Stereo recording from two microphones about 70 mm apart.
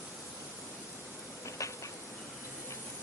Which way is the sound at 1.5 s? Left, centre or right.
Left.